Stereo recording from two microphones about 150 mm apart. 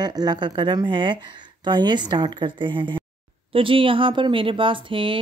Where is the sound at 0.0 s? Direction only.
25° right (ahead or behind).